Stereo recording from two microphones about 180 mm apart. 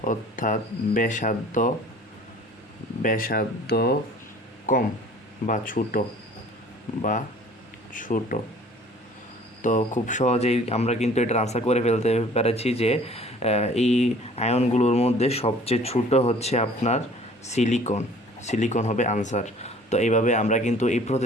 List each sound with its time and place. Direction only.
0.0 s speech: 45° left (ahead or behind)
3.0 s speech: 50° left (ahead or behind)
4.6 s speech: 45° left (ahead or behind)
7.9 s speech: 50° left (ahead or behind)
9.6 s speech: 45° left (ahead or behind)